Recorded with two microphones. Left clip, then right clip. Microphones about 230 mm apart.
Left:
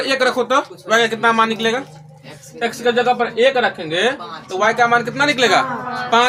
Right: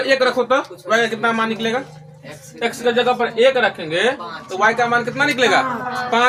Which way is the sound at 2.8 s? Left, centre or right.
Left.